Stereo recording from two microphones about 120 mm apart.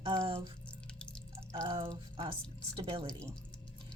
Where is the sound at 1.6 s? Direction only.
50° right (ahead or behind).